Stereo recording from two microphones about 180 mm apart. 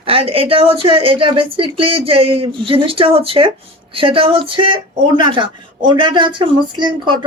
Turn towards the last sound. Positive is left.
turn(degrees=-25)  # may be behind; listen again after turning